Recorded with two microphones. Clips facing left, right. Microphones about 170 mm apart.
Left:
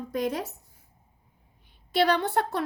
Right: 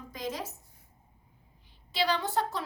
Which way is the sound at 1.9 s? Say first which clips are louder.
Left 6 dB; 60° left (ahead or behind).